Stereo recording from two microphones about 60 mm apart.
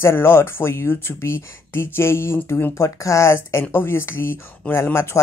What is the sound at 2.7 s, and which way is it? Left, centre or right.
Speech, left.